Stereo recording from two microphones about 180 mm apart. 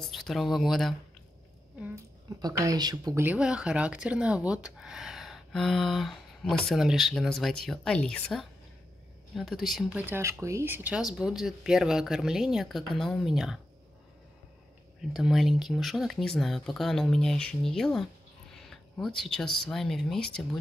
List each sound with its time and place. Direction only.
0.0 s speech: centre (ahead or behind)
1.8 s a woman's voice: 15° right (ahead or behind)
3.3 s speech: 5° right (ahead or behind)
15.0 s speech: centre (ahead or behind)